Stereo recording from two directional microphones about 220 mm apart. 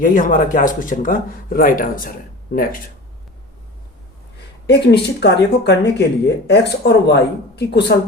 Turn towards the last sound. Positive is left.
turn(degrees=50)  # may be behind; listen again after turning